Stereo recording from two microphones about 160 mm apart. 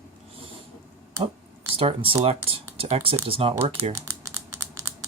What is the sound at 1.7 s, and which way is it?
Speech, 35° right (ahead or behind).